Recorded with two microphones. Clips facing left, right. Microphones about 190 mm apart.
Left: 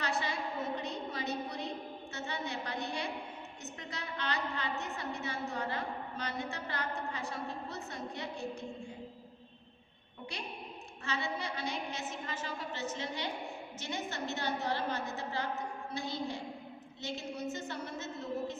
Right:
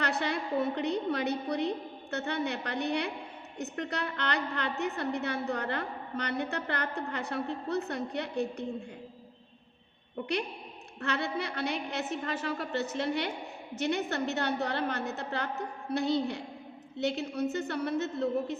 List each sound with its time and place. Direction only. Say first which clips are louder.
0.0 s a woman's voice: right 4 dB; 65° right (ahead or behind)
10.2 s a woman's voice: right 10 dB; 60° right (ahead or behind)